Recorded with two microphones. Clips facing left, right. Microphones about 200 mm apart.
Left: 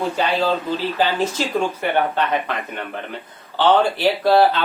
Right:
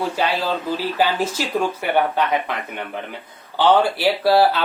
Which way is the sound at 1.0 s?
10° right (ahead or behind).